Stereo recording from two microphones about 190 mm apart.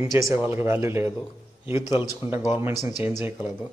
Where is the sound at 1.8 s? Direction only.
20° left (ahead or behind).